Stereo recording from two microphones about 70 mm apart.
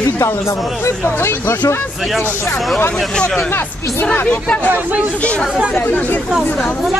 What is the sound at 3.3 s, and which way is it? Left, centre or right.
Speech, left.